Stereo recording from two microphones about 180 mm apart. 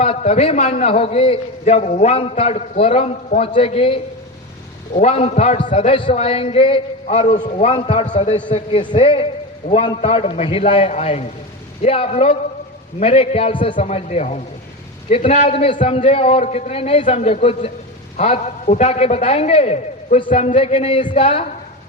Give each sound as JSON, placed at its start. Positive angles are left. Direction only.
{"t": 0.0, "sound": "a man's voice", "side_deg": 35}
{"t": 8.4, "sound": "a man's voice", "side_deg": 25}
{"t": 13.7, "sound": "a man's voice", "side_deg": 40}